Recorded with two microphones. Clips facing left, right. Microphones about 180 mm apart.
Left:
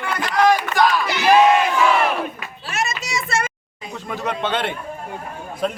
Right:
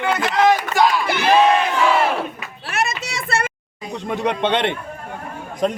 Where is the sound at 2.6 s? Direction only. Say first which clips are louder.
Right 2 dB; 60° right (ahead or behind).